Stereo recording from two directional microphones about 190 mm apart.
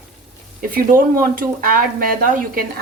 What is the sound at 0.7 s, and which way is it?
Speech, 50° right (ahead or behind).